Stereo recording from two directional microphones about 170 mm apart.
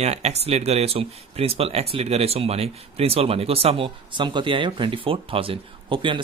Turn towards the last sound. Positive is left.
turn(degrees=-30)  # may be behind; listen again after turning